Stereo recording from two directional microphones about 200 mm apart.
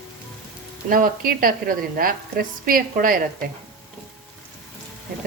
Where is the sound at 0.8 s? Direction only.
45° right (ahead or behind).